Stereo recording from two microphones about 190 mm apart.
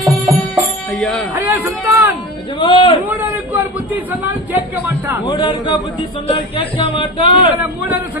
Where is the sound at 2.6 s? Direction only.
25° left (ahead or behind).